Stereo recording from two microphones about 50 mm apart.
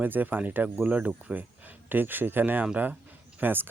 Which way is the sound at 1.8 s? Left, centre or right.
Right.